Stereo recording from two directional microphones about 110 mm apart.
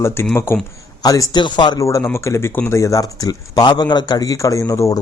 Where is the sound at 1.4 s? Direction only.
45° left (ahead or behind).